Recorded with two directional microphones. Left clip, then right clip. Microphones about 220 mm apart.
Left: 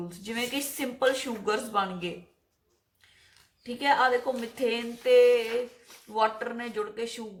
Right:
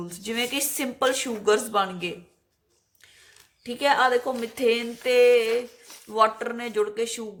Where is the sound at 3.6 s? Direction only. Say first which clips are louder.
Right 3 dB; 50° right (ahead or behind).